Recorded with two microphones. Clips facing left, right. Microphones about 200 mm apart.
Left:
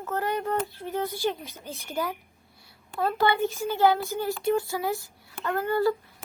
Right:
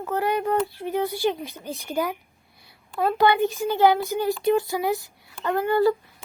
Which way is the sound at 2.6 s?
15° right (ahead or behind).